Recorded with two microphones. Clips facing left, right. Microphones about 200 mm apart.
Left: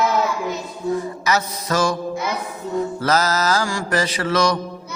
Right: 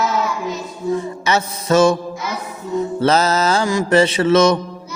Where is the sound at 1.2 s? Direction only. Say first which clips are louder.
Right 5 dB; 25° right (ahead or behind).